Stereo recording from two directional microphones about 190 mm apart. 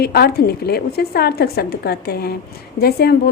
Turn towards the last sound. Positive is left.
turn(degrees=55)  # may be behind; listen again after turning